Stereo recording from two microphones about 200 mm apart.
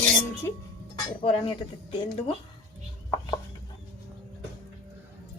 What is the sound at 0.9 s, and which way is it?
Speech, 25° left (ahead or behind).